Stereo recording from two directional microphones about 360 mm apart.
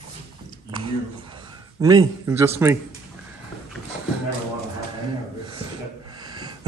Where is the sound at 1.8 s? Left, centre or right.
Centre.